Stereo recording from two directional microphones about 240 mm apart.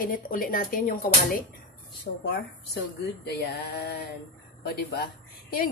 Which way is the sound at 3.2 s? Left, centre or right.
Left.